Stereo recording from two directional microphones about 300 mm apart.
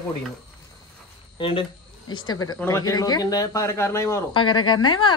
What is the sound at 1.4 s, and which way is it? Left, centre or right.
Speech, centre.